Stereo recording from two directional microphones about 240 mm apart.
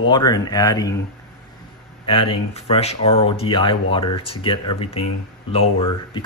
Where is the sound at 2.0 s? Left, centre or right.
Left.